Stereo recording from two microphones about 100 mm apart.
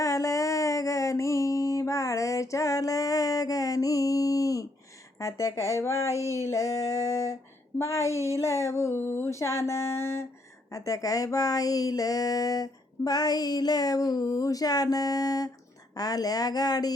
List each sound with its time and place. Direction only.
0.0 s music: 35° left (ahead or behind)
5.2 s speech: 30° left (ahead or behind)